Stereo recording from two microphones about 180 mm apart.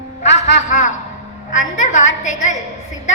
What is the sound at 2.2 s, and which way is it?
Speech, 45° left (ahead or behind).